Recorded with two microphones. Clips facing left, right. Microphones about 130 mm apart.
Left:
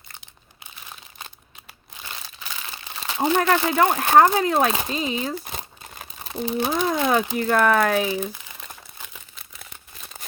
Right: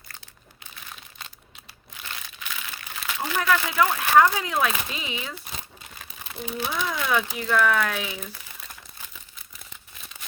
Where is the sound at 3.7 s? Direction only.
45° left (ahead or behind).